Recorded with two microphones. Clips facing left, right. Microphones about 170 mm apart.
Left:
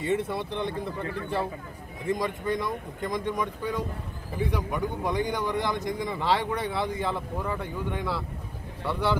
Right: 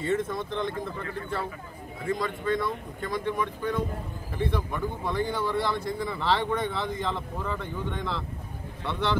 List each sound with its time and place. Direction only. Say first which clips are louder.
0.3 s a man's voice: even; 10° left (ahead or behind)